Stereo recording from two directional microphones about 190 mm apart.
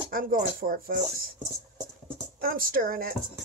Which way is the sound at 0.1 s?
45° right (ahead or behind).